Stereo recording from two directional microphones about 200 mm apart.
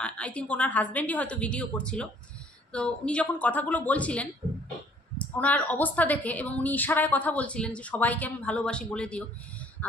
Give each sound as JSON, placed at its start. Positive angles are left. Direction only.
{"t": 0.0, "sound": "a woman's voice", "side_deg": 5}
{"t": 5.4, "sound": "a woman's voice", "side_deg": 10}